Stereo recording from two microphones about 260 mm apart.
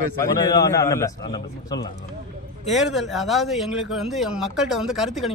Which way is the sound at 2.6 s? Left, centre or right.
Centre.